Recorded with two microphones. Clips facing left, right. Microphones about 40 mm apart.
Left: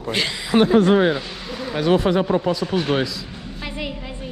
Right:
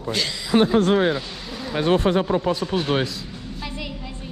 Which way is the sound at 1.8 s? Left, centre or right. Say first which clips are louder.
Left 1 dB; right.